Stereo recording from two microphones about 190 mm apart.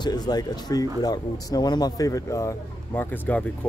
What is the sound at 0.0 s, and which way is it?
A man's voice, 20° left (ahead or behind).